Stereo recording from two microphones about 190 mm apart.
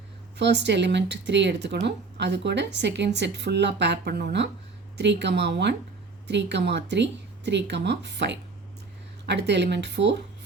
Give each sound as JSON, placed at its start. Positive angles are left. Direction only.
{"t": 0.3, "sound": "speech", "side_deg": -65}